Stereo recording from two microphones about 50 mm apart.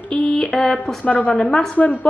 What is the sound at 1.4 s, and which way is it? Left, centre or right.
Speech, centre.